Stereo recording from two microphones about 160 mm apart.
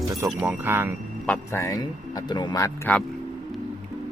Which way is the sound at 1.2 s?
10° left (ahead or behind).